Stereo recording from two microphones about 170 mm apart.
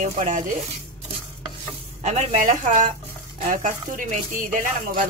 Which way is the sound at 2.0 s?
50° right (ahead or behind).